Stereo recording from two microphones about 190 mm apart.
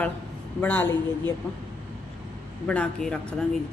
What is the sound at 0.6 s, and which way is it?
Speech, 10° left (ahead or behind).